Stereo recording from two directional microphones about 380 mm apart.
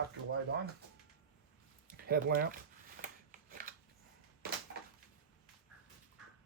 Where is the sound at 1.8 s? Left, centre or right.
Right.